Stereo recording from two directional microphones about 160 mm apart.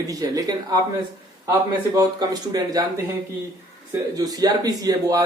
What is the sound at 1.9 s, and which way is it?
Speech, 20° right (ahead or behind).